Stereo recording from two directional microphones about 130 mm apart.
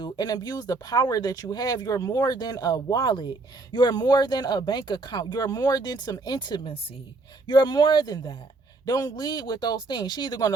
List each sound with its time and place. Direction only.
0.0 s speech: 30° left (ahead or behind)